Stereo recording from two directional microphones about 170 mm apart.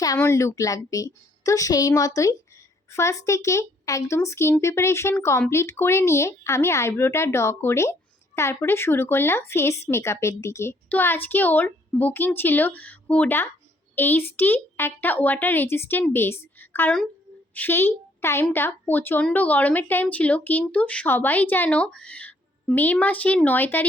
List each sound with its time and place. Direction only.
0.0 s a woman's voice: 20° left (ahead or behind)